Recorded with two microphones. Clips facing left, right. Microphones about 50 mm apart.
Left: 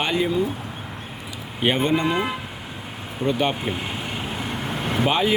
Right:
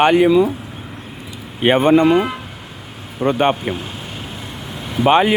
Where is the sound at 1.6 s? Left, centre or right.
Right.